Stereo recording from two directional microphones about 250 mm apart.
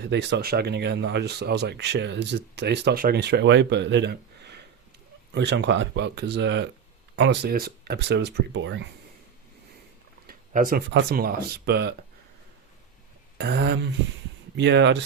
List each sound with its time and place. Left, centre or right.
0.1 s speech: right
10.2 s speech: right
13.4 s speech: right